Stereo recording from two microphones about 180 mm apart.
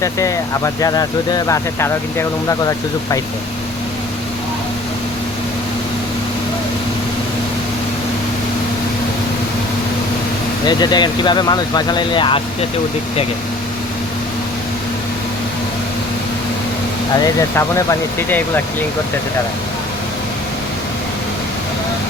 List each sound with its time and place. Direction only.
0.0 s speech: 15° left (ahead or behind)
10.7 s speech: 25° left (ahead or behind)
17.2 s speech: 15° left (ahead or behind)